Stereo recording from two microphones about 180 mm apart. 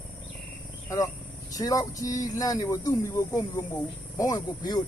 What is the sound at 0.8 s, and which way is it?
Speech, 20° left (ahead or behind).